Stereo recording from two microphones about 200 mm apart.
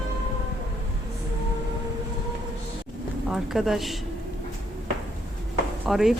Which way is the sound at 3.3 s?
Centre (ahead or behind).